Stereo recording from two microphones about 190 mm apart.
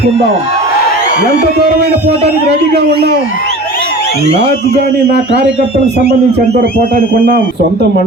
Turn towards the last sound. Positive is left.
turn(degrees=-50)  # may be behind; listen again after turning